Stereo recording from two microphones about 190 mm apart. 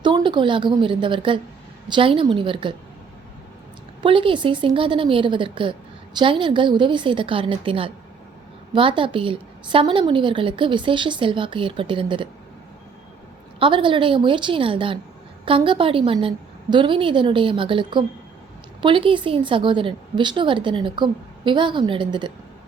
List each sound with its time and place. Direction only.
0.0 s a woman's voice: 25° right (ahead or behind)
4.0 s a woman's voice: 25° right (ahead or behind)
13.6 s a woman's voice: 25° right (ahead or behind)